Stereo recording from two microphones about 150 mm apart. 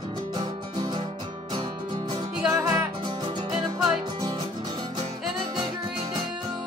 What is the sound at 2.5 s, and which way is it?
Music, 20° right (ahead or behind).